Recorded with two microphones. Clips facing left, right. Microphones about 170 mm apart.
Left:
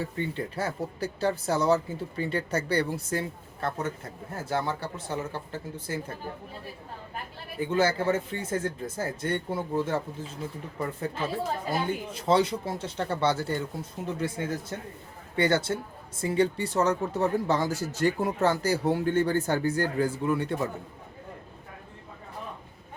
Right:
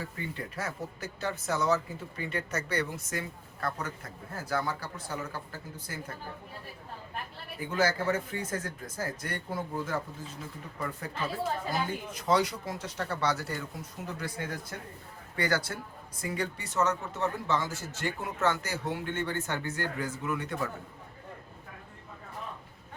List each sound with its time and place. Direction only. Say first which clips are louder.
0.0 s speech: left 7 dB; 30° left (ahead or behind)
7.7 s speech: left 3 dB; 25° left (ahead or behind)